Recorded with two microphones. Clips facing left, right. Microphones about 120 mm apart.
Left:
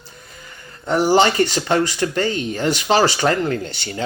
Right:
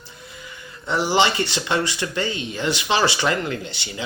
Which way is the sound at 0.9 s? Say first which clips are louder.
Left 5 dB; 45° left (ahead or behind).